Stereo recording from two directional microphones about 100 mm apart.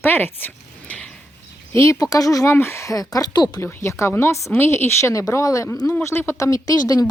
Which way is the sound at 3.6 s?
25° left (ahead or behind).